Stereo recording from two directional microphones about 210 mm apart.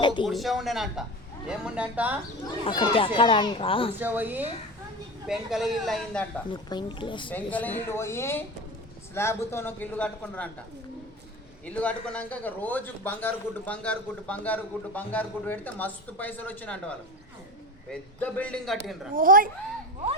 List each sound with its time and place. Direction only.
0.0 s speech: 20° left (ahead or behind)
0.3 s a man's voice: centre (ahead or behind)
2.6 s a child's voice: 25° left (ahead or behind)
3.9 s a man's voice: 10° right (ahead or behind)
6.5 s a child's voice: 20° left (ahead or behind)
7.3 s a man's voice: 10° left (ahead or behind)
11.6 s a man's voice: 5° left (ahead or behind)
19.1 s a child's voice: 40° right (ahead or behind)